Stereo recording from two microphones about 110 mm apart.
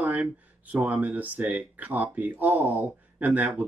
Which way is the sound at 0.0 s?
15° right (ahead or behind).